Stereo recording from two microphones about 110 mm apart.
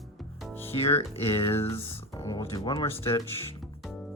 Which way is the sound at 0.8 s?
60° left (ahead or behind).